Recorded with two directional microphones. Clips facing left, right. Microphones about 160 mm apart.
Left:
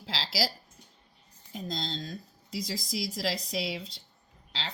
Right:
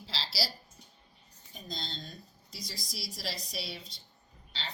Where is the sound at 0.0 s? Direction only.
90° left.